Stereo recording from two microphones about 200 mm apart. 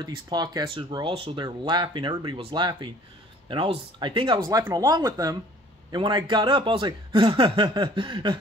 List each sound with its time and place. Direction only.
0.0 s speech: 20° right (ahead or behind)